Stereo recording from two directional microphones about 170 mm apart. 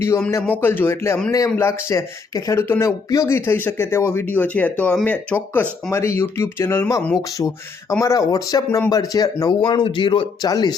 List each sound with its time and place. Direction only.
0.3 s speech: 15° left (ahead or behind)